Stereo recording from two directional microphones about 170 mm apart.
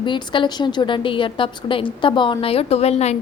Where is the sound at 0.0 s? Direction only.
25° left (ahead or behind).